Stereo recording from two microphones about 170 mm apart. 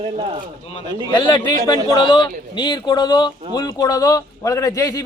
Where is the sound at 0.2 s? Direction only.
35° right (ahead or behind).